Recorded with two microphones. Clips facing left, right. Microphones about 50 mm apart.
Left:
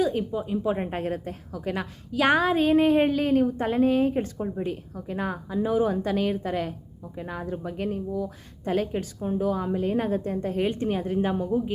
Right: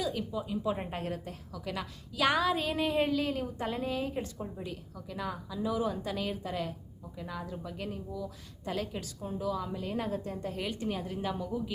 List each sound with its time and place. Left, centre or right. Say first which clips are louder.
0.0 s a woman's voice: left 8 dB; left